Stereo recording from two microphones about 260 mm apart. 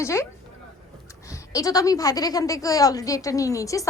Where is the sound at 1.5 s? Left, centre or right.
Centre.